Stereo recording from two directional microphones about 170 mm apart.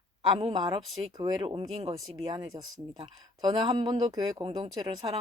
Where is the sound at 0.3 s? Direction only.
30° right (ahead or behind).